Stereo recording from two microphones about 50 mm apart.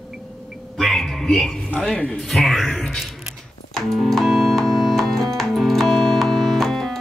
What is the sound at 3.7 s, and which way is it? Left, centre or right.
Keyboard, centre.